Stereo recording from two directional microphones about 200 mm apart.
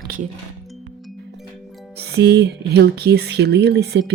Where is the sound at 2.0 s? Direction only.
55° right (ahead or behind).